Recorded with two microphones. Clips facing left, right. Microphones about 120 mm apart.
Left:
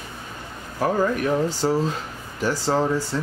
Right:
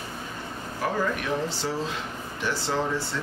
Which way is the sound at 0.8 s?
40° left (ahead or behind).